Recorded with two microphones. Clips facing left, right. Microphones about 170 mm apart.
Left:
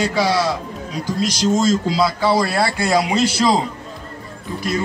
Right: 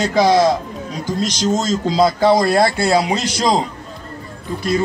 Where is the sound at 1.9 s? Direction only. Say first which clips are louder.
Right 4 dB; 45° right (ahead or behind).